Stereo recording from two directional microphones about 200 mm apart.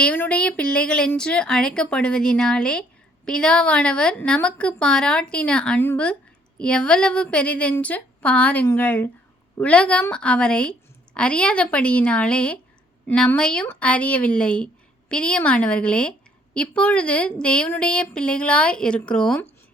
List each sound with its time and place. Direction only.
0.0 s a woman's voice: 5° left (ahead or behind)